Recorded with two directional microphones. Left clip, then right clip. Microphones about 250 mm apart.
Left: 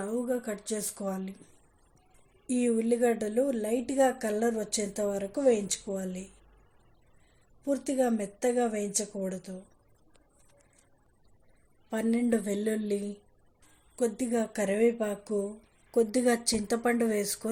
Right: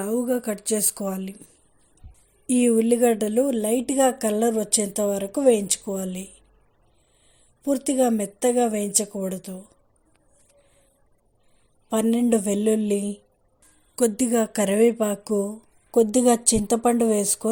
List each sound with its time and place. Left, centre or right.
0.0 s speech: right
2.5 s a woman's voice: right
7.6 s speech: right
11.9 s a woman's voice: right
16.5 s speech: right
16.7 s a woman's voice: right